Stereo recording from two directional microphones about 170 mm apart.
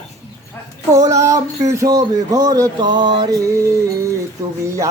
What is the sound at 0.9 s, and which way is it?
Speech, 20° right (ahead or behind).